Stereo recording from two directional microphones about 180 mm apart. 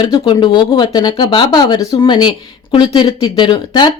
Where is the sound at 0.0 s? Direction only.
25° left (ahead or behind).